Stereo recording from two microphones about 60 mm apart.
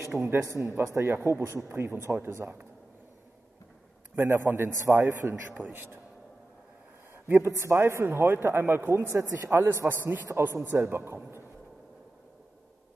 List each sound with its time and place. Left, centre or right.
0.1 s a man's voice: right
4.1 s speech: right
5.5 s speech: right
7.2 s a man's voice: right